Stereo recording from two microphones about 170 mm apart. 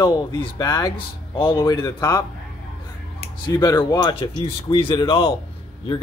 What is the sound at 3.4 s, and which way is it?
Speech, 25° left (ahead or behind).